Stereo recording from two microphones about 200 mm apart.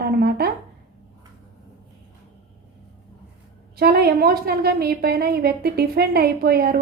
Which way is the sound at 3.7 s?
50° right (ahead or behind).